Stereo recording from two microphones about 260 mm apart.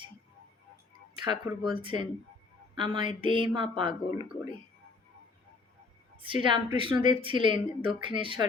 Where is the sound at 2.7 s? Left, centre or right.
Centre.